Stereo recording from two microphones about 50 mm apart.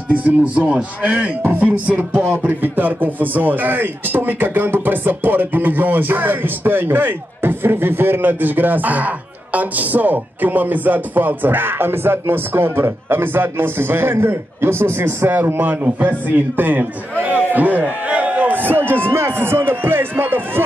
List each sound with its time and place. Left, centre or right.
0.1 s speech: right
2.2 s a man's voice: right
17.2 s a sound: right
18.6 s music: right